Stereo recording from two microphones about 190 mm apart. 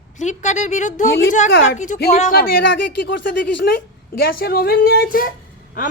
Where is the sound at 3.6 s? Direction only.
55° left (ahead or behind).